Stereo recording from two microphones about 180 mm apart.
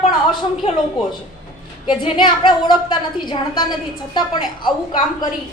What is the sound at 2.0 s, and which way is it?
A woman's voice, 25° left (ahead or behind).